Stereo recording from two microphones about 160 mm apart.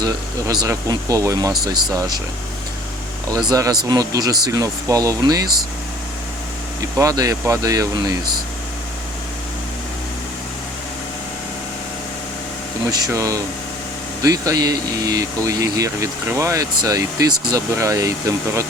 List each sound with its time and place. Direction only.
0.0 s speech: 25° right (ahead or behind)
3.5 s speech: 25° right (ahead or behind)
6.9 s speech: 20° right (ahead or behind)
12.9 s speech: 20° right (ahead or behind)